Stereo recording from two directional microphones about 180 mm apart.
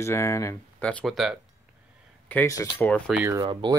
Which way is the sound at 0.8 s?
Centre (ahead or behind).